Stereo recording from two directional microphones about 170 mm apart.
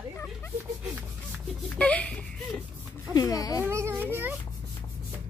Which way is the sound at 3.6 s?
15° right (ahead or behind).